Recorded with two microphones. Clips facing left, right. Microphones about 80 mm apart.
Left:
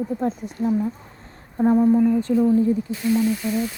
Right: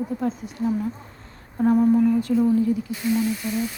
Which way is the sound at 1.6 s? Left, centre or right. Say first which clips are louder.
Left 1 dB; centre.